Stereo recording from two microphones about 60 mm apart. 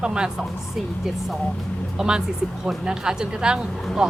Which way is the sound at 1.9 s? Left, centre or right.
Centre.